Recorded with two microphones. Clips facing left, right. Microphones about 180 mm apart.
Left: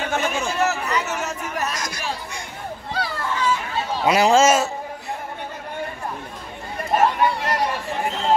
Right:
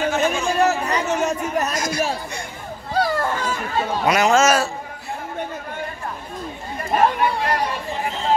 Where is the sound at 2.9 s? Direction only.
45° right (ahead or behind).